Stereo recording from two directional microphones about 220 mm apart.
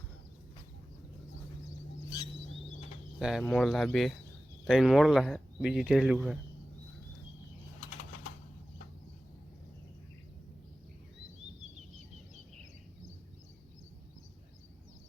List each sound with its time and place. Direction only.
3.2 s speech: 5° right (ahead or behind)